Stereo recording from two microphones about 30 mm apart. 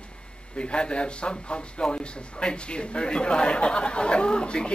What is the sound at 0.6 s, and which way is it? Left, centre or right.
Speech, left.